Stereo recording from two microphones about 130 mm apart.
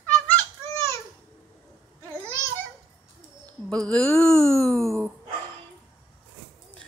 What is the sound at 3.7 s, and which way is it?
Speech, 5° left (ahead or behind).